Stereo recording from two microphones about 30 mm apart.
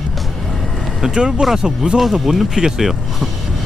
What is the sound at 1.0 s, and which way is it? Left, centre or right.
Speech, right.